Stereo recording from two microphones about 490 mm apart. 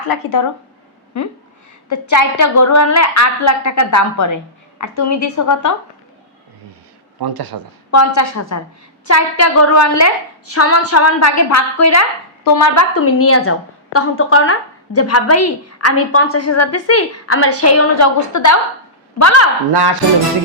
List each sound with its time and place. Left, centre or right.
0.0 s a woman's voice: left
7.2 s speech: right
7.9 s a woman's voice: left
19.7 s speech: right